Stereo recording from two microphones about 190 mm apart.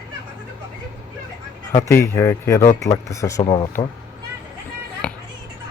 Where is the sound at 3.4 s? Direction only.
25° left (ahead or behind).